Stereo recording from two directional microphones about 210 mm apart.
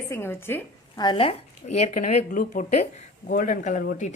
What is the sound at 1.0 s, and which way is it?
A woman's voice, 25° left (ahead or behind).